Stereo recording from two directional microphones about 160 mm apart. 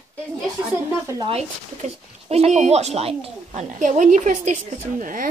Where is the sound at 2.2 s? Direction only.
40° right (ahead or behind).